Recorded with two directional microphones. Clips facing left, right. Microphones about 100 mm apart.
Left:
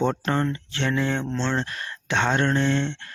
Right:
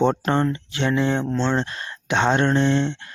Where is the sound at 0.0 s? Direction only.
25° right (ahead or behind).